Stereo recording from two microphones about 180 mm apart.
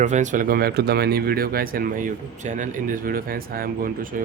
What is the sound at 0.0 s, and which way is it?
Speech, 40° right (ahead or behind).